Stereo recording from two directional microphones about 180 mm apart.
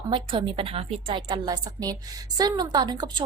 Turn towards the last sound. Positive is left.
turn(degrees=-25)  # may be behind; listen again after turning